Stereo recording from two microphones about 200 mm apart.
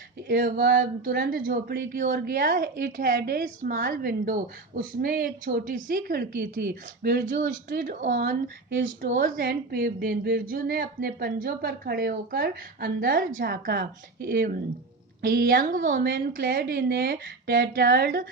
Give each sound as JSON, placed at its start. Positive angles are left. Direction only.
{"t": 0.3, "sound": "speech", "side_deg": -45}